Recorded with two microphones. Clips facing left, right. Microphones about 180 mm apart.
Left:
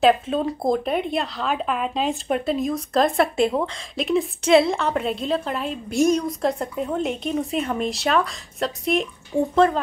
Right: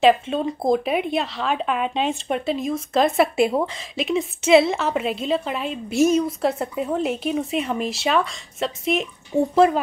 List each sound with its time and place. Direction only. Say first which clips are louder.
0.0 s speech: right 1 dB; centre (ahead or behind)